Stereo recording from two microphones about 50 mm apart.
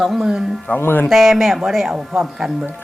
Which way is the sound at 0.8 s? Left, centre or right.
Left.